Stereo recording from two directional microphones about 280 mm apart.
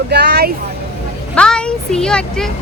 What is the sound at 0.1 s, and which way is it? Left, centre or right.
Speech, right.